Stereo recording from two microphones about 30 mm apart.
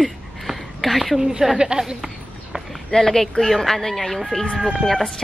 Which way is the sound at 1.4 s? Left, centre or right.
Centre.